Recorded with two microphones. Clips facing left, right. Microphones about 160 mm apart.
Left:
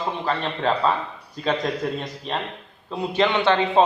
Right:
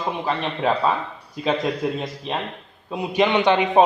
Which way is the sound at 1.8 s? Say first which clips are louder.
Right 2 dB; 10° right (ahead or behind).